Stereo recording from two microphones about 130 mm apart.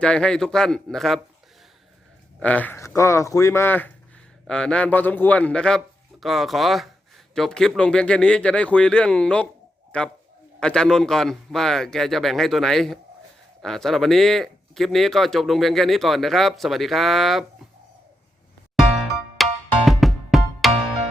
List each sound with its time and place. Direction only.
0.0 s speech: 5° left (ahead or behind)
2.4 s speech: 10° left (ahead or behind)
19.4 s music: centre (ahead or behind)